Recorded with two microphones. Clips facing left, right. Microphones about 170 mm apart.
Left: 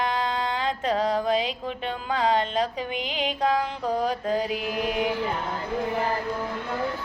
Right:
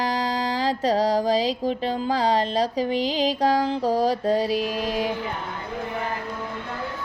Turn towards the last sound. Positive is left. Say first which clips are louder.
# right 1 dB
turn(degrees=-30)  # may be behind; listen again after turning